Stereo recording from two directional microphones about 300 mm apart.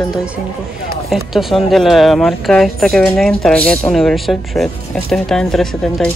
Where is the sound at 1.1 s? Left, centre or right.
Centre.